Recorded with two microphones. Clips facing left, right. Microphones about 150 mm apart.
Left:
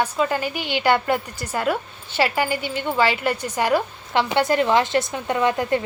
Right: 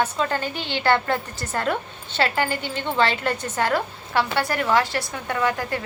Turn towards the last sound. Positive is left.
turn(degrees=20)  # may be behind; listen again after turning